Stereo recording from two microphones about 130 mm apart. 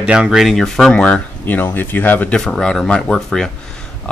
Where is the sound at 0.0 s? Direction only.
5° right (ahead or behind).